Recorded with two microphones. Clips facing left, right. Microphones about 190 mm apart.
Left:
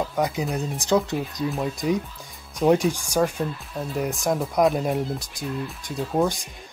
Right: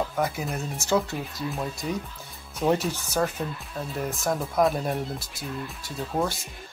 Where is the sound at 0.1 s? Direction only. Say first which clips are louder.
Left 3 dB; 15° left (ahead or behind).